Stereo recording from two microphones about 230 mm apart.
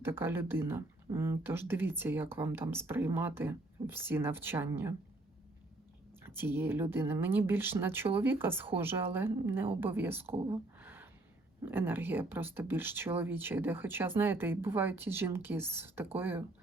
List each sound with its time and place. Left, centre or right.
0.0 s speech: centre
6.2 s speech: centre